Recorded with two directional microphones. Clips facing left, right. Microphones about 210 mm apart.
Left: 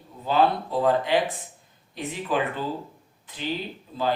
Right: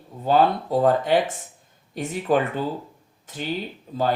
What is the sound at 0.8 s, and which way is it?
Speech, 45° right (ahead or behind).